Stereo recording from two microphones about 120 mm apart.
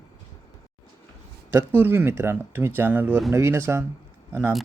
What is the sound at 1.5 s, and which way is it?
Speech, 15° right (ahead or behind).